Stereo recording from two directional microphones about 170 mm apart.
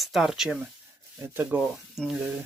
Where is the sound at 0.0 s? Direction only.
Centre (ahead or behind).